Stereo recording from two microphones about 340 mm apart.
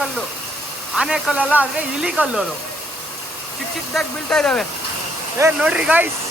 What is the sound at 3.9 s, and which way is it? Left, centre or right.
Speech, centre.